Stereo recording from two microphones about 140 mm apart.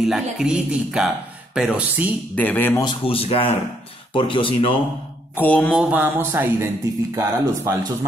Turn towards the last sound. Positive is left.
turn(degrees=-20)  # may be behind; listen again after turning